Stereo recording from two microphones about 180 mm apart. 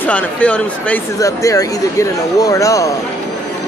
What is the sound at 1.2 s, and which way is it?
Speech, 20° left (ahead or behind).